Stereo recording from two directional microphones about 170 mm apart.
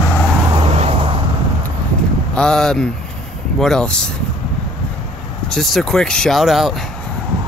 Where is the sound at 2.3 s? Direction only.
5° left (ahead or behind).